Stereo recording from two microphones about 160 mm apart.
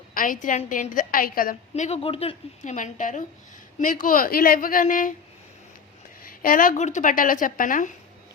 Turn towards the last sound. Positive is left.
turn(degrees=55)  # may be behind; listen again after turning